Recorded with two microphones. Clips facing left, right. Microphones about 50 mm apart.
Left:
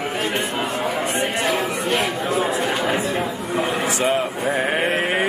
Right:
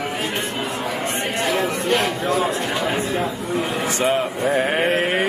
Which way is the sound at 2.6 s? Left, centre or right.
Centre.